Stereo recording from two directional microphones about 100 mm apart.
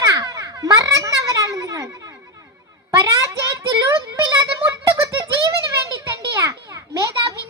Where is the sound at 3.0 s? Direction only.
30° right (ahead or behind).